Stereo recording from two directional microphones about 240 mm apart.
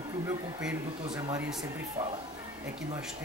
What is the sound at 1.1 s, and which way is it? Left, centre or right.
Speech, centre.